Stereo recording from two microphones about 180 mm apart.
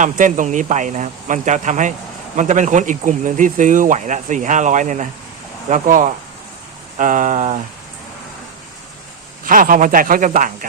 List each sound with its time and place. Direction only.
0.0 s speech: 45° right (ahead or behind)
9.4 s speech: 50° right (ahead or behind)